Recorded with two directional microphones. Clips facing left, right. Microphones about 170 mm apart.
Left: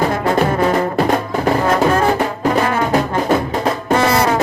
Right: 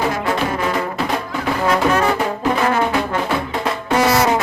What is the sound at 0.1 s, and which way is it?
Music, 45° left (ahead or behind).